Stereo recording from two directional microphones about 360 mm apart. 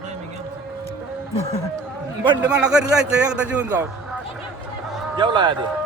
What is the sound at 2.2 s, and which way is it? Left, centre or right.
A man's voice, centre.